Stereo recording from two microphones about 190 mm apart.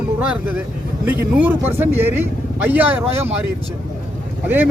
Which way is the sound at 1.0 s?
10° right (ahead or behind).